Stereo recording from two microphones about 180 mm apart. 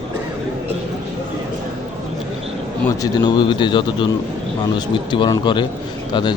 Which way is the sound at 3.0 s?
25° left (ahead or behind).